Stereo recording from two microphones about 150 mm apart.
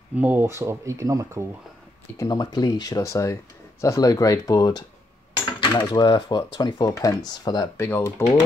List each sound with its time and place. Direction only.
0.1 s speech: 10° right (ahead or behind)
2.1 s speech: 25° left (ahead or behind)